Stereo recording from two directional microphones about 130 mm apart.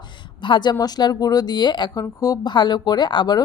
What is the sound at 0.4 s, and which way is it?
A woman's voice, 35° left (ahead or behind).